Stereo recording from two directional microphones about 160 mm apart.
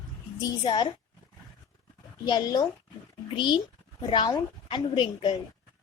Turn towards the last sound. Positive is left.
turn(degrees=30)  # may be behind; listen again after turning